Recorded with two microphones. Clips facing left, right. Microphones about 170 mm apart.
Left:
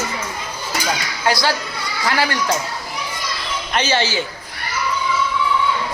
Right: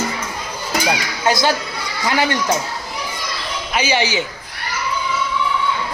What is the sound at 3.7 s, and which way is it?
Speech, 10° right (ahead or behind).